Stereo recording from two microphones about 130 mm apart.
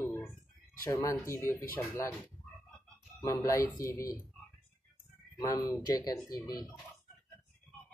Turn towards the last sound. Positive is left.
turn(degrees=30)  # may be behind; listen again after turning